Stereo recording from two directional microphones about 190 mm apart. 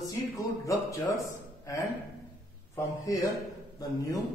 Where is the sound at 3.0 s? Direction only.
20° left (ahead or behind).